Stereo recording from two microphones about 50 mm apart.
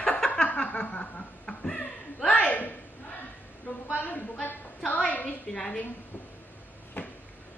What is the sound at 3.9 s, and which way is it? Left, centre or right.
Speech, left.